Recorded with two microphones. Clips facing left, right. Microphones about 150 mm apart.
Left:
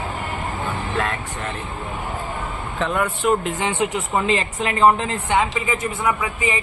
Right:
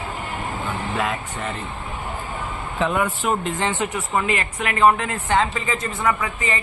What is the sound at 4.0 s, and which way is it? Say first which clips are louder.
Speech: left 2 dB; 20° left (ahead or behind).